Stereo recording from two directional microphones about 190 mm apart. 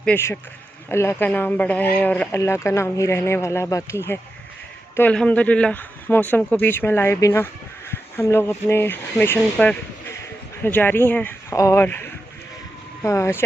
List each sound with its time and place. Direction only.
0.0 s speech: 10° left (ahead or behind)